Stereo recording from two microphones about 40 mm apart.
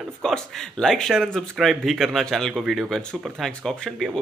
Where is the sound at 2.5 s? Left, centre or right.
Centre.